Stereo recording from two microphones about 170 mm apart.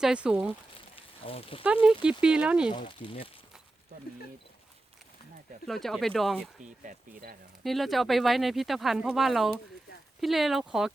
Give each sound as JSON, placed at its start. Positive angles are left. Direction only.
{"t": 0.0, "sound": "speech", "side_deg": -5}
{"t": 0.9, "sound": "a sound", "side_deg": 35}
{"t": 1.6, "sound": "speech", "side_deg": -5}
{"t": 2.6, "sound": "speech", "side_deg": 30}
{"t": 5.6, "sound": "speech", "side_deg": 0}
{"t": 6.6, "sound": "speech", "side_deg": -50}
{"t": 7.6, "sound": "speech", "side_deg": 0}